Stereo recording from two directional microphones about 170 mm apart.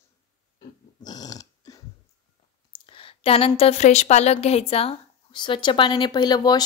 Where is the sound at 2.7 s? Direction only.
30° left (ahead or behind).